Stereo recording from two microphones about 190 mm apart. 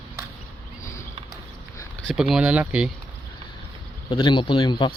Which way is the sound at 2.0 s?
Centre (ahead or behind).